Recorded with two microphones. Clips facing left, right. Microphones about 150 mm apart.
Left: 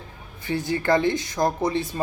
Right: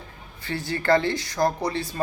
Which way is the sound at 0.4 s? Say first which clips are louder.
Left 1 dB; 20° left (ahead or behind).